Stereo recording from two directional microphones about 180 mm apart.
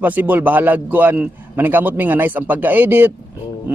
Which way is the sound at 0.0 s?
10° right (ahead or behind).